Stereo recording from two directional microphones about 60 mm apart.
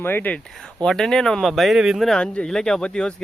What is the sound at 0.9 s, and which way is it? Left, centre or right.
Speech, centre.